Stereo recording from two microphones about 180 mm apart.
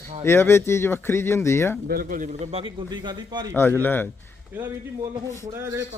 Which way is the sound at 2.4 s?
30° right (ahead or behind).